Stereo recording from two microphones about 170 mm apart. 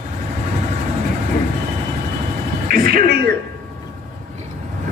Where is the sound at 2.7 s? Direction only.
60° right (ahead or behind).